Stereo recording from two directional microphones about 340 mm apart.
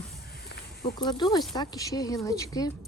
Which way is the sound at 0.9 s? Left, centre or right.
Centre.